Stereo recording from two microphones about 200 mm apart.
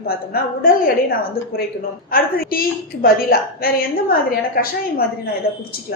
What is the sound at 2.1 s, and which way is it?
A woman's voice, 45° left (ahead or behind).